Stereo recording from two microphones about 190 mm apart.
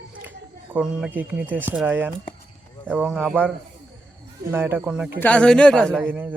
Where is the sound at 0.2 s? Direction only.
10° right (ahead or behind).